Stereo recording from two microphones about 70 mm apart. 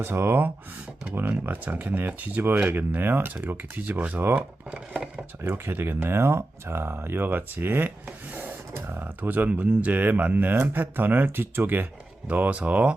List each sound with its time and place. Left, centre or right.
0.0 s speech: right; by 5.2 s centre
5.4 s speech: right; by 12.9 s centre